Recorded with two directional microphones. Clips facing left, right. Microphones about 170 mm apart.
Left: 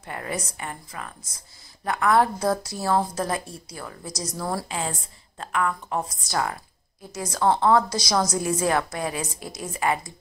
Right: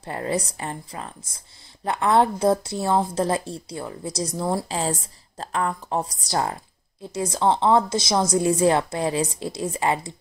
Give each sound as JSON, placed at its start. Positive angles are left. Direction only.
{"t": 0.0, "sound": "speech", "side_deg": -30}